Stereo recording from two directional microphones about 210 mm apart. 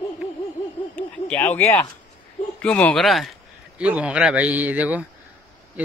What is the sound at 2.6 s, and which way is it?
A man's voice, 5° left (ahead or behind).